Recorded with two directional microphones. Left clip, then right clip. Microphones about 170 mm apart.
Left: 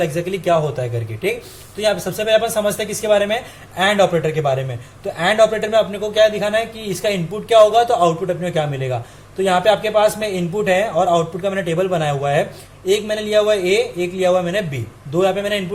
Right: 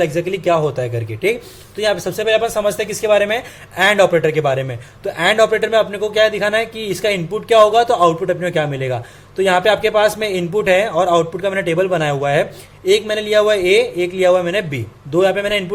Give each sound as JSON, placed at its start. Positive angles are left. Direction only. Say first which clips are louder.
{"t": 0.0, "sound": "a man's voice", "louder": "right 3 dB", "side_deg": -30}